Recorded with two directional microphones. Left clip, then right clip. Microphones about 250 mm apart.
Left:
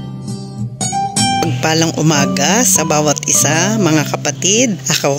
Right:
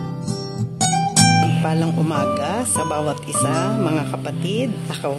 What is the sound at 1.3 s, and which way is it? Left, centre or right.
Speech, left.